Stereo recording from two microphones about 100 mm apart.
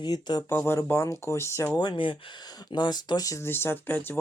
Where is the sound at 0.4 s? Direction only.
25° left (ahead or behind).